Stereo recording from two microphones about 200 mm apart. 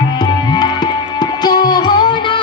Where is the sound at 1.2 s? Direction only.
20° left (ahead or behind).